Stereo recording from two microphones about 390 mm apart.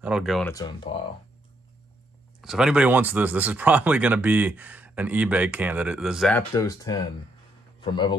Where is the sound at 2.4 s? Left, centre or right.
Centre.